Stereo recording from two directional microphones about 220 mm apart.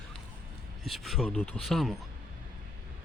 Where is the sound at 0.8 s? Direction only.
Centre (ahead or behind).